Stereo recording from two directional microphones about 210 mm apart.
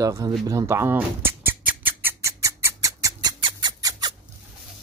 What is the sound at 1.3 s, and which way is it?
Squawk, 10° right (ahead or behind).